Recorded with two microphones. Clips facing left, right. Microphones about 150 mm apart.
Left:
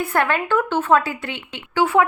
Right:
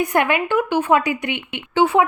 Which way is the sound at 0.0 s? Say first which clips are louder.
Right 2 dB; 20° right (ahead or behind).